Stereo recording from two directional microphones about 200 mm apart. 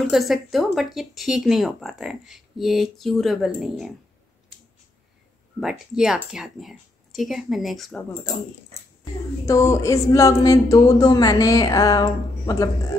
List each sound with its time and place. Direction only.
0.1 s speech: centre (ahead or behind)
5.6 s speech: centre (ahead or behind)
9.5 s speech: 15° left (ahead or behind)